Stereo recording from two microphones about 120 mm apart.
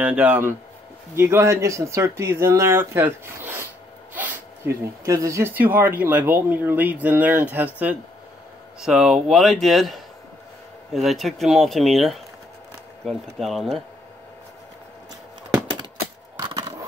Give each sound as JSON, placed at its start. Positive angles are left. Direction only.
{"t": 0.0, "sound": "speech", "side_deg": -10}
{"t": 5.5, "sound": "speech", "side_deg": -15}
{"t": 16.3, "sound": "a sound", "side_deg": -35}